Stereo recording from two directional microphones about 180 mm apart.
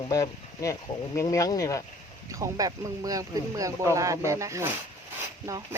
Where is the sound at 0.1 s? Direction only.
20° left (ahead or behind).